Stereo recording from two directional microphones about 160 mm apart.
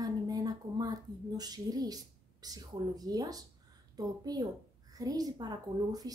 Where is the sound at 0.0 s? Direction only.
25° right (ahead or behind).